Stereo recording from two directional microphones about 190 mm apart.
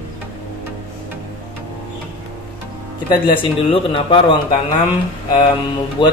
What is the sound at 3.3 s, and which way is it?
Speech, 25° left (ahead or behind).